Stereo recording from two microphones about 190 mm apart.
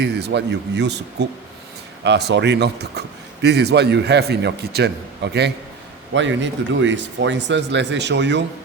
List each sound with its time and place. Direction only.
0.0 s a man's voice: 60° right (ahead or behind)
6.1 s speech: 75° right (ahead or behind)